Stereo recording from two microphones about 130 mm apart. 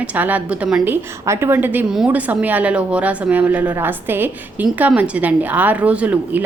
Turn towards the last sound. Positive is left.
turn(degrees=-15)  # may be behind; listen again after turning